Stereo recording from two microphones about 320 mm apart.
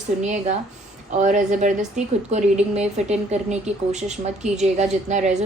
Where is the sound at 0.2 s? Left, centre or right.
Right.